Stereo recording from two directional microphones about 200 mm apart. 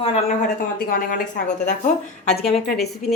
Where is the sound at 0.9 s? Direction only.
45° left (ahead or behind).